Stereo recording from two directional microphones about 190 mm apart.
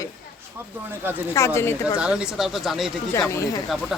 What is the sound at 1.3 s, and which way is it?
Speech, 15° left (ahead or behind).